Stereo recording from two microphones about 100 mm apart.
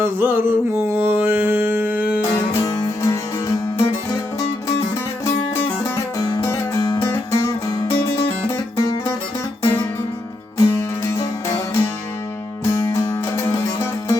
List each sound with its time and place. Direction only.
0.0 s a sound: 25° right (ahead or behind)
0.9 s music: 20° right (ahead or behind)
2.6 s music: 35° left (ahead or behind)
6.0 s music: 35° left (ahead or behind)
10.6 s music: 30° left (ahead or behind)